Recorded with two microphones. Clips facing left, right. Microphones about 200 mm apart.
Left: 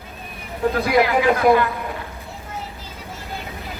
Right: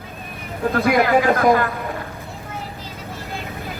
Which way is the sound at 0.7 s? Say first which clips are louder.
Right 2 dB; 50° right (ahead or behind).